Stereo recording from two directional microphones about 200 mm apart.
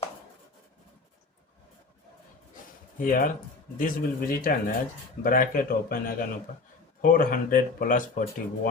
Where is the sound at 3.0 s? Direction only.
45° left (ahead or behind).